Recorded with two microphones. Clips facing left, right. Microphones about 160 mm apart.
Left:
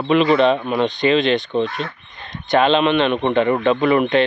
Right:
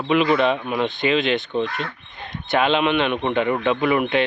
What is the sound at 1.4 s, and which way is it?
Speech, 20° left (ahead or behind).